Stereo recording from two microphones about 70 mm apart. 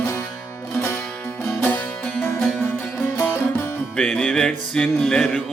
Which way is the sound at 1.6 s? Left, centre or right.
Left.